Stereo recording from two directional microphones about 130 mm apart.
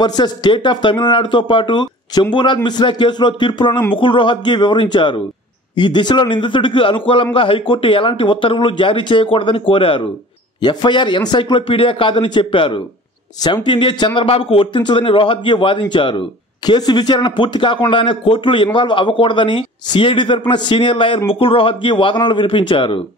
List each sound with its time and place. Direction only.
0.0 s speech: 35° left (ahead or behind)